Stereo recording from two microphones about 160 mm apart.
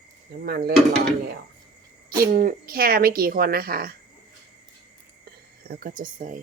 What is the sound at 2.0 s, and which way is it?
Speech, 65° right (ahead or behind).